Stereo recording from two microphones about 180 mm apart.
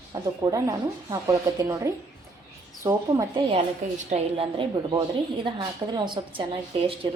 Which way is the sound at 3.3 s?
35° right (ahead or behind).